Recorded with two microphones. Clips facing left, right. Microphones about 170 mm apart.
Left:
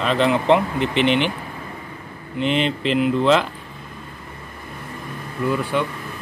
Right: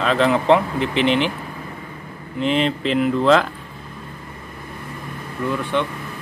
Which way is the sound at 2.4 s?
Centre (ahead or behind).